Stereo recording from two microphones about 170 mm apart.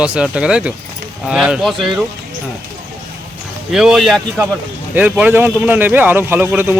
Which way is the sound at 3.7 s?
5° right (ahead or behind).